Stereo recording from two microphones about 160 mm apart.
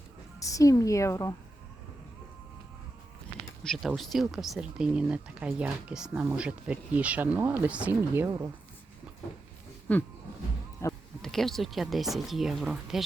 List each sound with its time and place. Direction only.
0.3 s a woman's voice: 20° left (ahead or behind)
3.6 s speech: centre (ahead or behind); by 8.4 s 15° right (ahead or behind)
9.9 s speech: 10° left (ahead or behind)
10.8 s a sound: 15° left (ahead or behind)
11.2 s speech: centre (ahead or behind)